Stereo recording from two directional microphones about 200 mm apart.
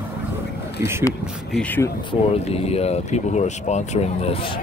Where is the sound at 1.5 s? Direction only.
5° left (ahead or behind).